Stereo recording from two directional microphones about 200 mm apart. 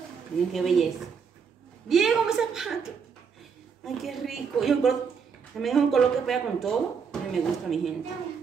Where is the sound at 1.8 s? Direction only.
Centre (ahead or behind).